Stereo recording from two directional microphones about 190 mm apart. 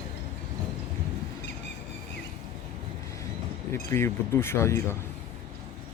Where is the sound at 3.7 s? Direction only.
15° left (ahead or behind).